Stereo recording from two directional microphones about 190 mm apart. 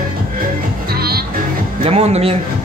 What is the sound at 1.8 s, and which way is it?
Speech, 30° right (ahead or behind).